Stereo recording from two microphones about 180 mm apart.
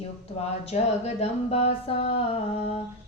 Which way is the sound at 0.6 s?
35° left (ahead or behind).